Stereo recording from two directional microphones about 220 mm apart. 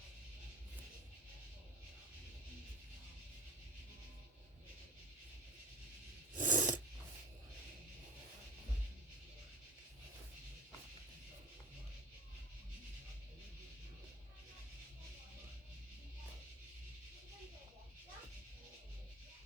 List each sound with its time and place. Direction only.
6.3 s filing: 35° right (ahead or behind)